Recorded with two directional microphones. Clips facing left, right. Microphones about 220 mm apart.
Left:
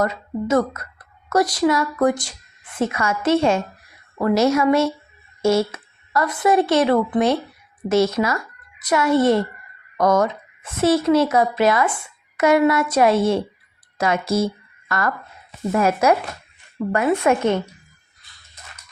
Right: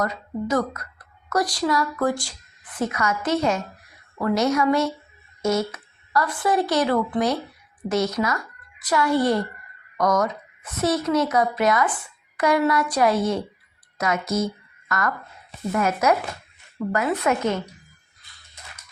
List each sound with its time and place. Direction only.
0.0 s a woman's voice: 25° left (ahead or behind)